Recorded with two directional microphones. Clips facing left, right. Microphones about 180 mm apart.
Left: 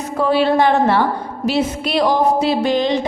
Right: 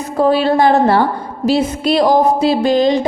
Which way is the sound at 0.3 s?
40° right (ahead or behind).